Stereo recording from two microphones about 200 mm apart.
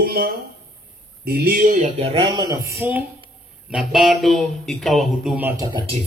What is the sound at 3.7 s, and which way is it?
Speech, 5° right (ahead or behind).